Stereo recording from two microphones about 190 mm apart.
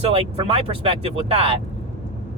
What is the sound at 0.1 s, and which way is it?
Speech, 30° right (ahead or behind).